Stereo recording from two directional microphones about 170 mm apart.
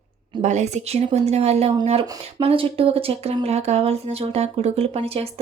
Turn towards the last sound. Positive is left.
turn(degrees=-35)  # may be behind; listen again after turning